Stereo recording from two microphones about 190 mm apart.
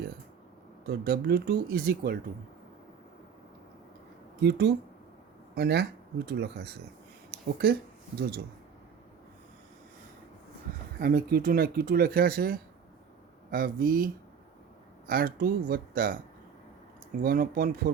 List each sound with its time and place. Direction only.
0.9 s speech: 55° right (ahead or behind)
4.4 s speech: 60° right (ahead or behind)
11.0 s speech: 55° right (ahead or behind)
17.2 s speech: 50° right (ahead or behind)